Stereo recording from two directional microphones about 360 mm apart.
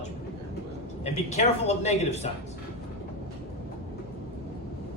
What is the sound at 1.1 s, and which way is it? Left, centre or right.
Speech, centre.